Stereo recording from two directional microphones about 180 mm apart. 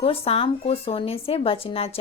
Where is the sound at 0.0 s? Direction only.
30° left (ahead or behind).